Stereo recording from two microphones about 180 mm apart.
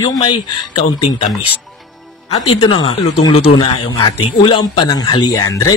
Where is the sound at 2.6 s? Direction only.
30° left (ahead or behind).